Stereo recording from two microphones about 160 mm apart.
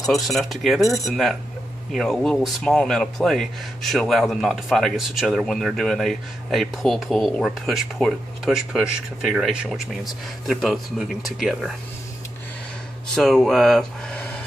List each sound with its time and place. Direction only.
0.0 s speech: centre (ahead or behind)
13.1 s speech: 5° left (ahead or behind)